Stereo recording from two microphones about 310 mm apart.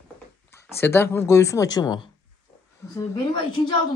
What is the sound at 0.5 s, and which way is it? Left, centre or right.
Speech, centre.